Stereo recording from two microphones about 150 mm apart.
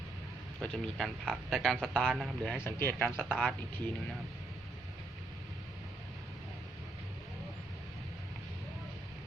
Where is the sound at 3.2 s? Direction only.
Centre (ahead or behind).